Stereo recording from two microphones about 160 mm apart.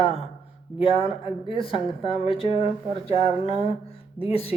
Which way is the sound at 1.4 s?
35° left (ahead or behind).